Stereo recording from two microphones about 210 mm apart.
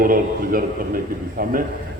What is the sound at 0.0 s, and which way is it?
Speech, 45° right (ahead or behind).